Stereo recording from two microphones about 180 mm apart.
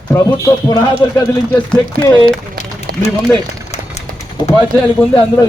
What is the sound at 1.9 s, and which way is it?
Speech, 55° right (ahead or behind).